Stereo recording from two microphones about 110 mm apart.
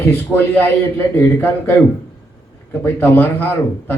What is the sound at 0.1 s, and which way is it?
A man's voice, 20° left (ahead or behind).